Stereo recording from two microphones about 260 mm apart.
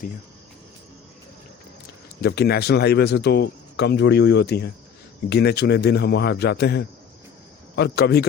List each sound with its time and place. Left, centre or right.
2.2 s speech: left